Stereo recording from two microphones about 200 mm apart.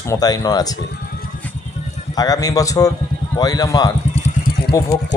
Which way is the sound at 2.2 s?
20° left (ahead or behind).